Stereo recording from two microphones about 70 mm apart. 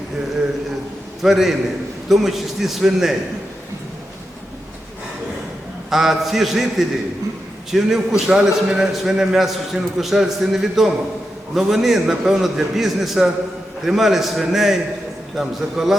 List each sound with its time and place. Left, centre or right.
1.2 s a man's voice: centre
5.9 s a man's voice: centre